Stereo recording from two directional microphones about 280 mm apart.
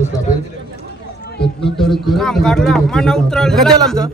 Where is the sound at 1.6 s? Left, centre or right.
Centre.